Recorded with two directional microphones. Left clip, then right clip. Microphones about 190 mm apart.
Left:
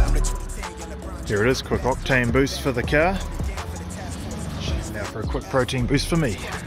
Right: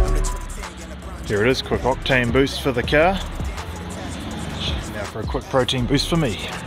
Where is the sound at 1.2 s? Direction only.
5° right (ahead or behind).